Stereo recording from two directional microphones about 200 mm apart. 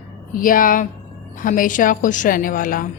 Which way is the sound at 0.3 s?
45° left (ahead or behind).